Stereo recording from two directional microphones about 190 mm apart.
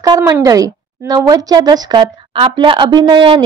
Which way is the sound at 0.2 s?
15° right (ahead or behind).